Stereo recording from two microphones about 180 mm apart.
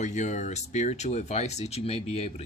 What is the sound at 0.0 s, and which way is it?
Speech, 40° left (ahead or behind).